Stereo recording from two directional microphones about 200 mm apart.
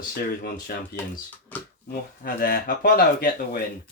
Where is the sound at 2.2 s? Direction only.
45° left (ahead or behind).